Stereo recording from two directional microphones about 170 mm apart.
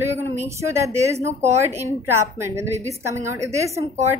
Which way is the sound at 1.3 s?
40° right (ahead or behind).